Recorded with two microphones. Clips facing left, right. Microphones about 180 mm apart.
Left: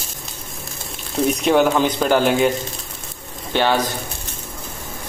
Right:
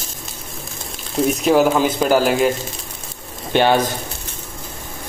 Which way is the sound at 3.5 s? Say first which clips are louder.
Right 3 dB; 15° right (ahead or behind).